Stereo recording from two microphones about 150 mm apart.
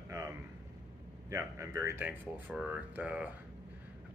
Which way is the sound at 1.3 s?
20° right (ahead or behind).